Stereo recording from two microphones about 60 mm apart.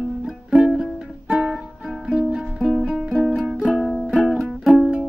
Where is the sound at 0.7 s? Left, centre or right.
Centre.